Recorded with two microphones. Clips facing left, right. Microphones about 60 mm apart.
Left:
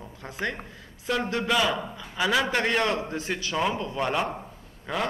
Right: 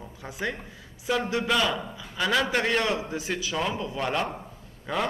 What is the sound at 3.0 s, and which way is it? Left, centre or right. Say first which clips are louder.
Speech: even; centre.